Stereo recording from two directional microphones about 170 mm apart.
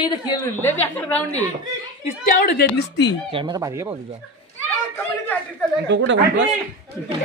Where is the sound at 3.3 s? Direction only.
25° right (ahead or behind).